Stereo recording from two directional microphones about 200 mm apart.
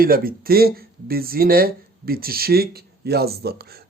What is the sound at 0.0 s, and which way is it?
Speech, 45° right (ahead or behind).